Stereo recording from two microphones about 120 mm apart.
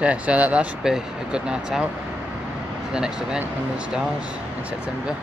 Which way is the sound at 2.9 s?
5° right (ahead or behind).